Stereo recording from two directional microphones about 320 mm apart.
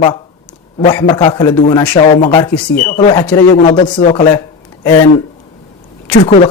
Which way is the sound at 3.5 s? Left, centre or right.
Centre.